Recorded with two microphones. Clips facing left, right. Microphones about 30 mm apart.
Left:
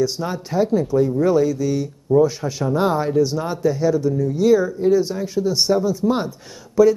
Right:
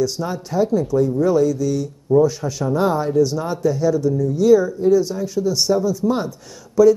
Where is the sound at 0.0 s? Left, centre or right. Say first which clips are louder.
Even; centre.